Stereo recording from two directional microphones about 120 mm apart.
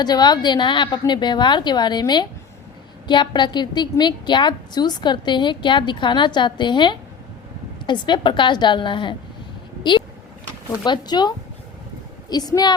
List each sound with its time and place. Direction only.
0.0 s a woman's voice: 35° left (ahead or behind)
10.8 s a woman's voice: 40° left (ahead or behind)